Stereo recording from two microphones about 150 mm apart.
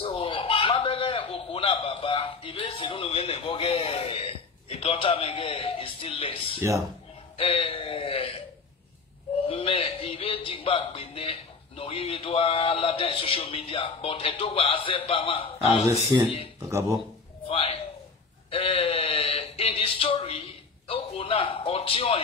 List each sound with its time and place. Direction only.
0.0 s a sound: 35° left (ahead or behind)
7.3 s speech: 40° left (ahead or behind)
9.5 s speech: 40° left (ahead or behind)
16.1 s speech: 25° right (ahead or behind)
17.5 s a man's voice: 40° left (ahead or behind)
18.5 s a sound: 35° left (ahead or behind)
20.9 s speech: 40° left (ahead or behind)